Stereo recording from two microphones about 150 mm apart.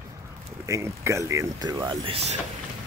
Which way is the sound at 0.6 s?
20° right (ahead or behind).